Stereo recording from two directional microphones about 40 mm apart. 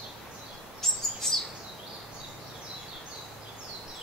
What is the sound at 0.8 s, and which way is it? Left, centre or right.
Chirp, centre.